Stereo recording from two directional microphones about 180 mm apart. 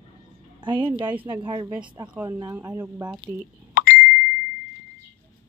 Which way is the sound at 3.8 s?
50° left (ahead or behind).